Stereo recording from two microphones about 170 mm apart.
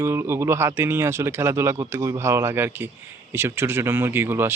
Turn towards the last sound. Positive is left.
turn(degrees=-15)  # may be behind; listen again after turning